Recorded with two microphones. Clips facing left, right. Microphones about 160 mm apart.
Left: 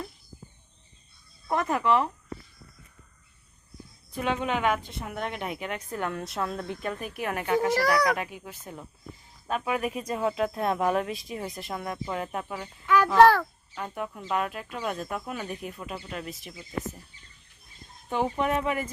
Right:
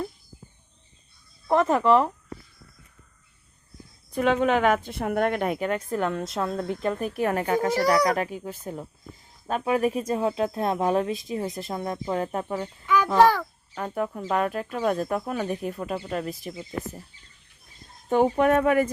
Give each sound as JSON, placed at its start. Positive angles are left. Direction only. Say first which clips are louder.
{"t": 1.5, "sound": "speech", "louder": "right 5 dB", "side_deg": -30}
{"t": 4.1, "sound": "speech", "louder": "right 7 dB", "side_deg": -50}
{"t": 6.1, "sound": "speech", "louder": "right 4 dB", "side_deg": -25}
{"t": 7.7, "sound": "a woman's voice", "louder": "right 4 dB", "side_deg": -20}
{"t": 8.1, "sound": "a woman's voice", "louder": "right 5 dB", "side_deg": -35}
{"t": 12.8, "sound": "a sound", "louder": "left 1 dB", "side_deg": 0}
{"t": 13.1, "sound": "a child's voice", "louder": "left 1 dB", "side_deg": 0}
{"t": 13.7, "sound": "speech", "louder": "right 6 dB", "side_deg": -40}
{"t": 18.3, "sound": "speech", "louder": "right 7 dB", "side_deg": -50}